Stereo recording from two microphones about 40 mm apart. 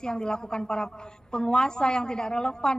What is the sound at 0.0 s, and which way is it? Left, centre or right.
A woman's voice, centre.